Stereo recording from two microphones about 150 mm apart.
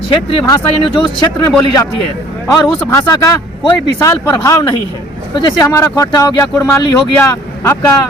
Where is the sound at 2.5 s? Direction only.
25° left (ahead or behind).